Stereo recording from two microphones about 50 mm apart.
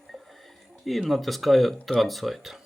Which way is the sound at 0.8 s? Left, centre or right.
Centre.